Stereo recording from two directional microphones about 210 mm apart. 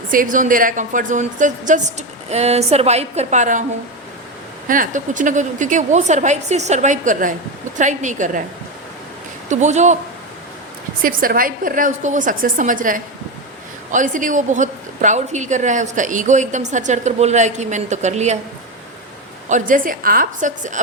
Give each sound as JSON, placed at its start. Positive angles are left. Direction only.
{"t": 0.1, "sound": "a woman's voice", "side_deg": -40}
{"t": 4.7, "sound": "a woman's voice", "side_deg": -40}
{"t": 9.5, "sound": "a woman's voice", "side_deg": -35}
{"t": 11.0, "sound": "a woman's voice", "side_deg": -40}
{"t": 19.5, "sound": "a woman's voice", "side_deg": -35}